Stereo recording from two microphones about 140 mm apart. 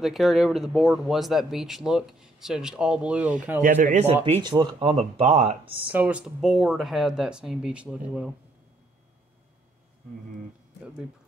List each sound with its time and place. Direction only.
0.0 s speech: centre (ahead or behind)
3.6 s speech: 70° right (ahead or behind)
4.0 s speech: 45° right (ahead or behind)
4.4 s speech: 35° right (ahead or behind)
5.9 s speech: 10° right (ahead or behind)